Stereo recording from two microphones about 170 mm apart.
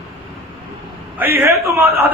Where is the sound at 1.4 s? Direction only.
15° right (ahead or behind).